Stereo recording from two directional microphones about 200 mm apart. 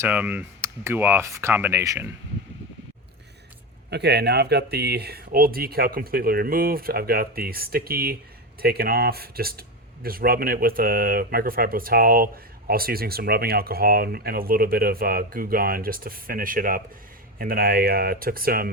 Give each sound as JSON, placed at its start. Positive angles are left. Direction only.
{"t": 0.0, "sound": "speech", "side_deg": -5}
{"t": 3.8, "sound": "speech", "side_deg": -55}